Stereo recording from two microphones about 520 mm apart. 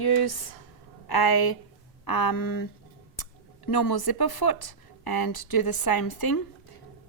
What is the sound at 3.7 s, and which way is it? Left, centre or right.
Speech, left.